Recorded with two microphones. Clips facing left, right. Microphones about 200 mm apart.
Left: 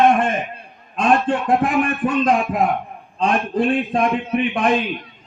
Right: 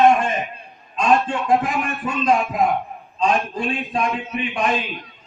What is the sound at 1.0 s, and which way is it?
Speech, 55° left (ahead or behind).